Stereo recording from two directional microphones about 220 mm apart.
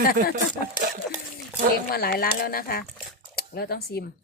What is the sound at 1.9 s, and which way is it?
A woman's voice, 45° left (ahead or behind).